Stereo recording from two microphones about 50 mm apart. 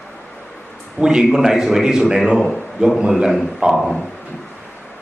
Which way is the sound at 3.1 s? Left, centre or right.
Centre.